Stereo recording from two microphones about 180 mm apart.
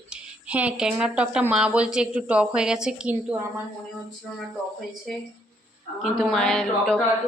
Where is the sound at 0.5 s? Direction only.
5° right (ahead or behind).